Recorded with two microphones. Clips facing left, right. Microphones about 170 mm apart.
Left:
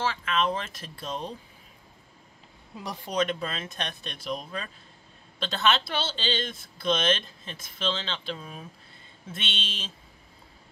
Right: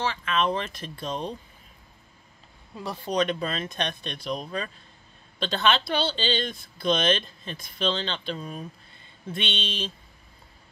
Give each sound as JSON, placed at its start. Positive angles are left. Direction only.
{"t": 0.0, "sound": "speech", "side_deg": 5}
{"t": 2.8, "sound": "speech", "side_deg": 15}
{"t": 3.2, "sound": "speech", "side_deg": 0}